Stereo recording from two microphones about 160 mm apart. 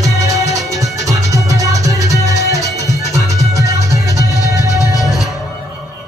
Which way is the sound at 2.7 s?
20° left (ahead or behind).